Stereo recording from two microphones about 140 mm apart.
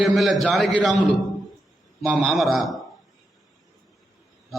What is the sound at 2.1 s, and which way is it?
Speech, centre (ahead or behind).